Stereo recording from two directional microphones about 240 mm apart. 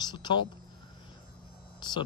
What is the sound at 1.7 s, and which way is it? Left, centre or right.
Speech, centre.